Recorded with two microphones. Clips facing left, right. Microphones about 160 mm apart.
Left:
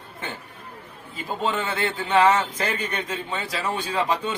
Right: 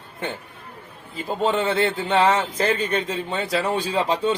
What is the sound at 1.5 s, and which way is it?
A man's voice, 30° right (ahead or behind).